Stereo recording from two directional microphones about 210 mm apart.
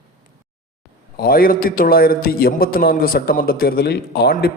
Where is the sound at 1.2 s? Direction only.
45° left (ahead or behind).